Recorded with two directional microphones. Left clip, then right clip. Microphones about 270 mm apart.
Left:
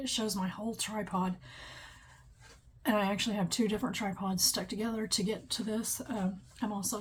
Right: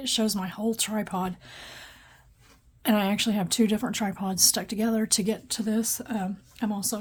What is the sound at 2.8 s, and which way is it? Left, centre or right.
Speech, right.